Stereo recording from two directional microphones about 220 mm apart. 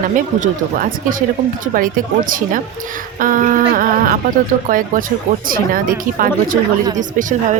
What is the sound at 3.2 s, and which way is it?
A woman's voice, 40° right (ahead or behind).